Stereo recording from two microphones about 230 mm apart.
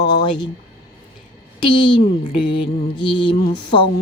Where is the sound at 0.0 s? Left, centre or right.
Centre.